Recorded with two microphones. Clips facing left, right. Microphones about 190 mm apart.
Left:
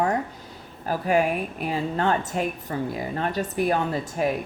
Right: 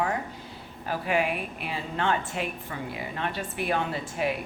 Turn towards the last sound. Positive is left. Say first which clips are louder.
# left 4 dB
turn(degrees=40)  # may be behind; listen again after turning